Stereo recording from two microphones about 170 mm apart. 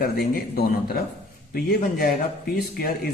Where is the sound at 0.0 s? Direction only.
60° left (ahead or behind).